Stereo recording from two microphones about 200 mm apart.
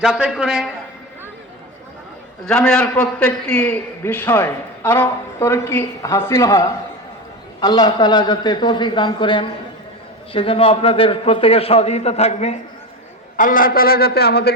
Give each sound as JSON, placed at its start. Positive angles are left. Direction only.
{"t": 0.0, "sound": "a man's voice", "side_deg": -5}
{"t": 2.5, "sound": "a man's voice", "side_deg": 5}
{"t": 13.3, "sound": "a man's voice", "side_deg": 45}